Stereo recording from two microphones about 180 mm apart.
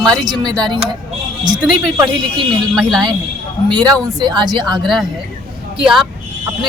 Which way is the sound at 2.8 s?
Centre (ahead or behind).